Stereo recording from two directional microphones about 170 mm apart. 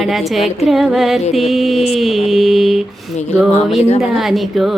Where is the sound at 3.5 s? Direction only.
40° left (ahead or behind).